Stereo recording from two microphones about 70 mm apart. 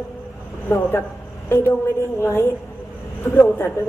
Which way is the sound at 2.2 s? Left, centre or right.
Left.